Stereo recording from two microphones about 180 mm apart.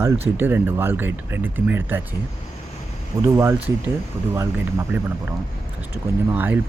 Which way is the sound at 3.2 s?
15° right (ahead or behind).